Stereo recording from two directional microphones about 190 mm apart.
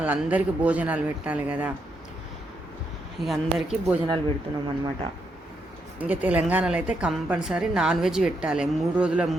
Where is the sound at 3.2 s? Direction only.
Centre (ahead or behind).